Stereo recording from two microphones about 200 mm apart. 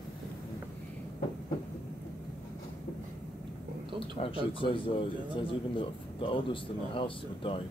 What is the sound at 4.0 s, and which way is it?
Speech, 30° left (ahead or behind).